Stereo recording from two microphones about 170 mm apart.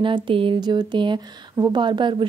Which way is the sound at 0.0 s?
30° right (ahead or behind).